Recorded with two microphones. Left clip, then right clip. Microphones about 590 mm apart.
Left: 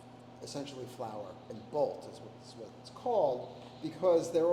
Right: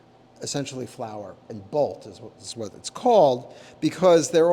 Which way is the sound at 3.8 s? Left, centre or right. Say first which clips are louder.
Right 11 dB; right.